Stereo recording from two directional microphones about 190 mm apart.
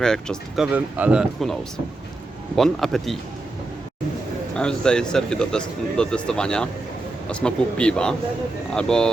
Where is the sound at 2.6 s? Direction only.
Centre (ahead or behind).